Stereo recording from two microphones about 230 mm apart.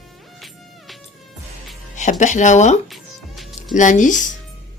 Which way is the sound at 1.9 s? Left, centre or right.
Left.